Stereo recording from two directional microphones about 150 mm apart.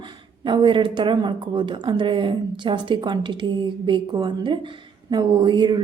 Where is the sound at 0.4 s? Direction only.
35° right (ahead or behind).